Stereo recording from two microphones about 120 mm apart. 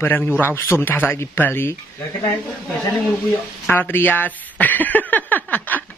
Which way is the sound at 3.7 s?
15° left (ahead or behind).